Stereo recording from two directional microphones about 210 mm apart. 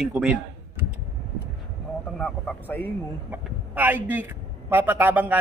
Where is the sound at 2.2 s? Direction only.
10° left (ahead or behind).